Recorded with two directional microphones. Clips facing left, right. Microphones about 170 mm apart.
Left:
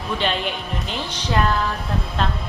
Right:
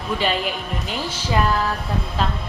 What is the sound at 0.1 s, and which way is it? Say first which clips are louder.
A woman's voice: right 1 dB; 5° right (ahead or behind).